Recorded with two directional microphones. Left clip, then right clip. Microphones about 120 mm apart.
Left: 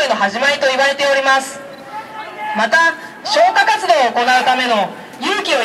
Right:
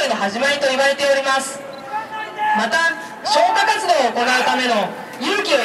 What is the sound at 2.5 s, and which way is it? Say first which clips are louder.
A man's voice: left 5 dB; 15° left (ahead or behind).